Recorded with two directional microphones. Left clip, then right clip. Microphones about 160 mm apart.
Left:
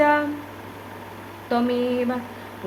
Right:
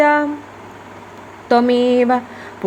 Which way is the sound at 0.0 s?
45° right (ahead or behind).